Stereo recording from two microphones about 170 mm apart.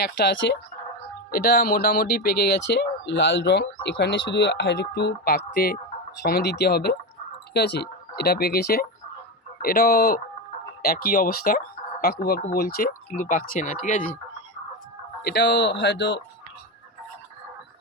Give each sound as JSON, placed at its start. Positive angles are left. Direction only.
{"t": 0.0, "sound": "speech", "side_deg": 90}
{"t": 1.3, "sound": "speech", "side_deg": 65}
{"t": 15.2, "sound": "speech", "side_deg": 75}